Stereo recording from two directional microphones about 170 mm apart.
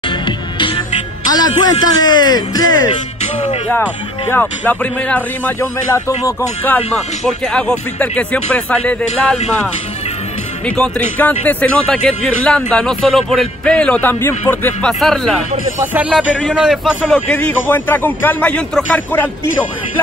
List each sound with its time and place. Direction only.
0.6 s music: 30° left (ahead or behind)
1.3 s speech: 25° left (ahead or behind)
4.3 s speech: 10° left (ahead or behind)
7.2 s a man's voice: 5° left (ahead or behind)
10.8 s a man's voice: 10° left (ahead or behind)
17.3 s speech: 10° left (ahead or behind)